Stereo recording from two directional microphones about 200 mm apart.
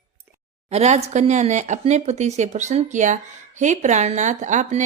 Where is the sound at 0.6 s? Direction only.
30° right (ahead or behind).